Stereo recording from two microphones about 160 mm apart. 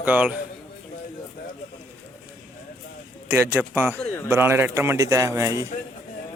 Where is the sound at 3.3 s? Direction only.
10° right (ahead or behind).